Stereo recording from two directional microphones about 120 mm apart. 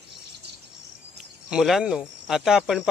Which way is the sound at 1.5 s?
5° right (ahead or behind).